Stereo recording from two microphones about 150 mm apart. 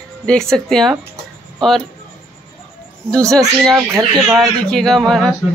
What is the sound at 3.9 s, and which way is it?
Speech, 20° right (ahead or behind).